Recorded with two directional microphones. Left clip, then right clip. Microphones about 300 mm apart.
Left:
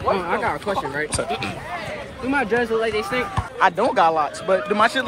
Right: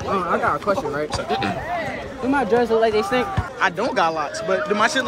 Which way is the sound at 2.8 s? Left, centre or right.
Right.